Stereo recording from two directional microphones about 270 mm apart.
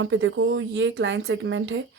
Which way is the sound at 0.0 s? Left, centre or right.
Right.